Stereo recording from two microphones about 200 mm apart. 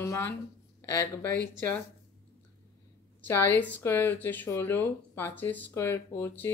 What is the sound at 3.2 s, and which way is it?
Speech, 10° left (ahead or behind).